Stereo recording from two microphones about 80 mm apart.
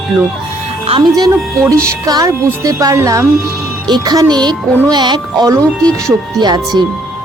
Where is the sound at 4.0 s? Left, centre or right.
Right.